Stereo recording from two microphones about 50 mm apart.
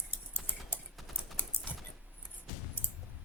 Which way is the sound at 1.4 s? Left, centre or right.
Left.